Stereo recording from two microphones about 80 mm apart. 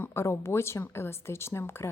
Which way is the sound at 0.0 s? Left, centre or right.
Left.